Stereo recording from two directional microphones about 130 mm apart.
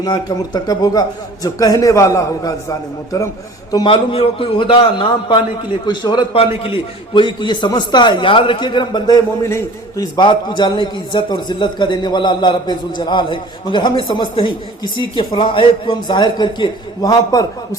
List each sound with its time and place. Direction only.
0.0 s a man's voice: 35° left (ahead or behind)
3.8 s a man's voice: 45° left (ahead or behind); by 17.7 s 30° left (ahead or behind)